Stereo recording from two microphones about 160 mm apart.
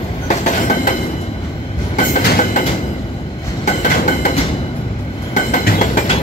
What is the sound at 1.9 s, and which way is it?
Train, 50° left (ahead or behind).